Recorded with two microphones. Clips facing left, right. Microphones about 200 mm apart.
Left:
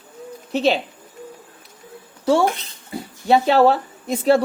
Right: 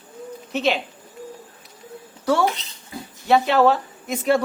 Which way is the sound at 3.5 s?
35° left (ahead or behind).